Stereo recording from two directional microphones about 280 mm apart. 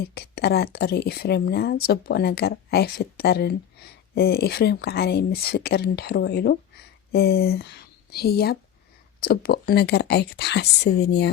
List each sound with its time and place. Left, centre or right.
0.1 s speech: left